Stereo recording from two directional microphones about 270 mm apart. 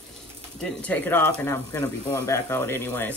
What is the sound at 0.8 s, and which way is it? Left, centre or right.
Speech, centre.